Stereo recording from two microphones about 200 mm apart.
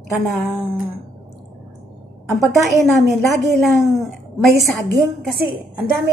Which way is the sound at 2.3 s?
Centre (ahead or behind).